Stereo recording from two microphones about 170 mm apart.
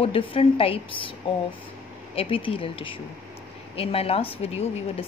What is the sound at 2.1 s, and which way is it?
Speech, 30° left (ahead or behind).